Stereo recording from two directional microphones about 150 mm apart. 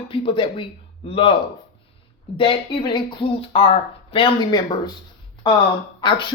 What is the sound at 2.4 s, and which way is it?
Speech, 35° left (ahead or behind).